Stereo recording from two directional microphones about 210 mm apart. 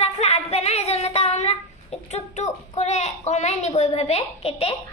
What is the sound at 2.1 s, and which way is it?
A woman's voice, 30° left (ahead or behind).